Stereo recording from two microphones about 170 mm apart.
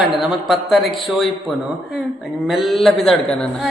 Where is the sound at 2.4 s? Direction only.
Centre (ahead or behind).